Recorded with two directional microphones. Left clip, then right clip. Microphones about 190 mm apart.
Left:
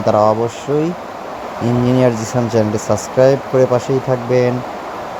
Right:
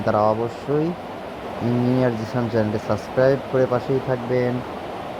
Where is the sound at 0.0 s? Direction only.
15° left (ahead or behind).